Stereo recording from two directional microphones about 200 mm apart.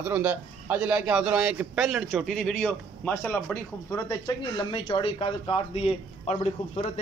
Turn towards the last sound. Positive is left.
turn(degrees=35)  # may be behind; listen again after turning